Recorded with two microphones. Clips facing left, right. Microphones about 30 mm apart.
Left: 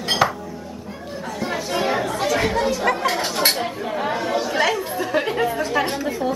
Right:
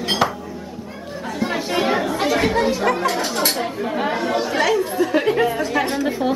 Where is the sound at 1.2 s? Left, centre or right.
Centre.